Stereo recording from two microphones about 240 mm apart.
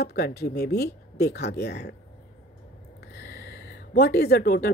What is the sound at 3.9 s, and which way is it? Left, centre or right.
Speech, left.